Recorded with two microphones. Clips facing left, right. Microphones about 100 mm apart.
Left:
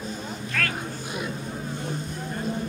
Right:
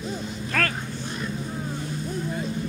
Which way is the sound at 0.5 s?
45° right (ahead or behind).